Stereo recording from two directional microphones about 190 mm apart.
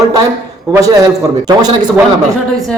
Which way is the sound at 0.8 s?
20° right (ahead or behind).